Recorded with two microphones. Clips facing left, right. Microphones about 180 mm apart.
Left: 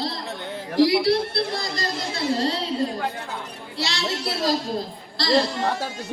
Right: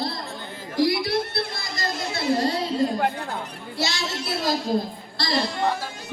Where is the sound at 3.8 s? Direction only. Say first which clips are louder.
Left 1 dB; 35° left (ahead or behind).